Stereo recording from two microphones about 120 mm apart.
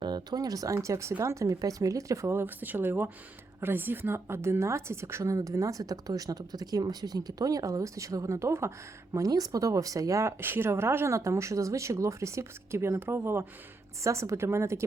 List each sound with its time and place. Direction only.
0.0 s speech: 35° right (ahead or behind)